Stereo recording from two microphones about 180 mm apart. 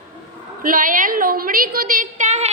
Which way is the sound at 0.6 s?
50° right (ahead or behind).